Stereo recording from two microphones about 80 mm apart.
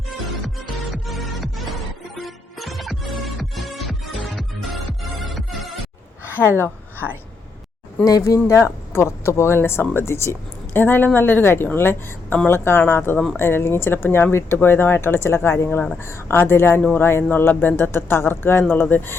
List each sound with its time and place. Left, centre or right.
0.4 s music: centre
8.0 s speech: left